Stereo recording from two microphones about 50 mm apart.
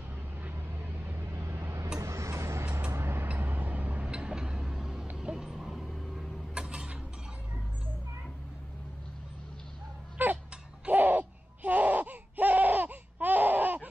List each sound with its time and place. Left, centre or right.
0.4 s vehicle: right
1.3 s vehicle: right
2.0 s a sound: right
2.9 s vehicle: right
3.3 s vehicle: right
4.1 s vehicle: centre
6.5 s tick-tock: centre
10.1 s a sound: right
10.9 s baby cry: right